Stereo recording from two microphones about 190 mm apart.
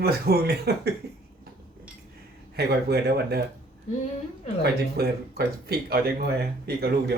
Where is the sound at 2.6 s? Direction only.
60° right (ahead or behind).